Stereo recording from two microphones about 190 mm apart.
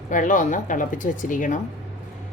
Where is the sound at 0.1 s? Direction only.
45° left (ahead or behind).